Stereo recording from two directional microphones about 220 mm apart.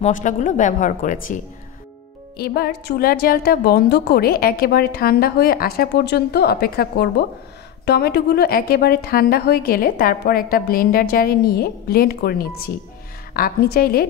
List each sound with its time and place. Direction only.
0.0 s a woman's voice: 35° left (ahead or behind)